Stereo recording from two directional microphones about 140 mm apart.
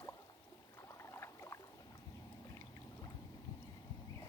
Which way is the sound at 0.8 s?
20° left (ahead or behind).